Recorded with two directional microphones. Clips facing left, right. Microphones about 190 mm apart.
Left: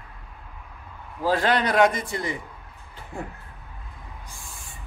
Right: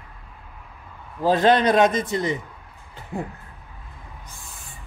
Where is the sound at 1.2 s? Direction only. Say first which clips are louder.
Right 5 dB; 20° right (ahead or behind).